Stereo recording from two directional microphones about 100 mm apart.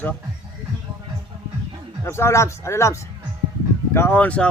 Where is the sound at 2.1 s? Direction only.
25° left (ahead or behind).